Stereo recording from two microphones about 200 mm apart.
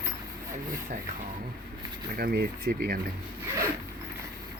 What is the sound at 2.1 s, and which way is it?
Speech, 50° right (ahead or behind).